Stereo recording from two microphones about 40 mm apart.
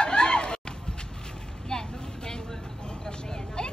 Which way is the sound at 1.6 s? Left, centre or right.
Centre.